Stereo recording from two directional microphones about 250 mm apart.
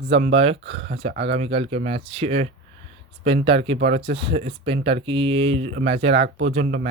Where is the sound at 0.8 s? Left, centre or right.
Right.